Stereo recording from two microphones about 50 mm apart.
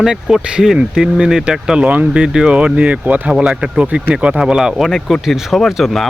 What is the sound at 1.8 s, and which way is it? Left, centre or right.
Speech, right.